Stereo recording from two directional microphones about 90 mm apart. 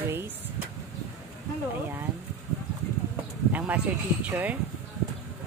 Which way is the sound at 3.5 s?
15° right (ahead or behind).